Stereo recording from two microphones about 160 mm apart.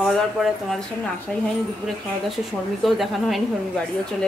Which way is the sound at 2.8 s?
Centre (ahead or behind).